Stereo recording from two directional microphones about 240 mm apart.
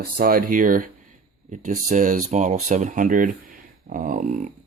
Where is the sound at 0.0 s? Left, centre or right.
Right.